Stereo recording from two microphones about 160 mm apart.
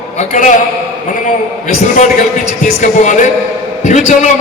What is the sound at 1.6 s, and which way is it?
A man's voice, 50° left (ahead or behind).